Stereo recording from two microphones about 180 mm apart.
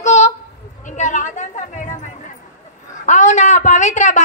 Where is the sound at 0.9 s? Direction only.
40° left (ahead or behind).